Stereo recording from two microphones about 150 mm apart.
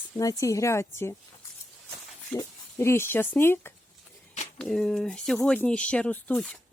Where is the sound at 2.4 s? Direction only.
15° left (ahead or behind).